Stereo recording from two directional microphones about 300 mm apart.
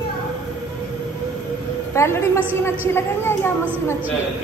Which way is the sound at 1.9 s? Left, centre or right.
Centre.